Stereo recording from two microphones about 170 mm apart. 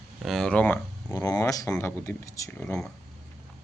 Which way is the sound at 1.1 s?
20° left (ahead or behind).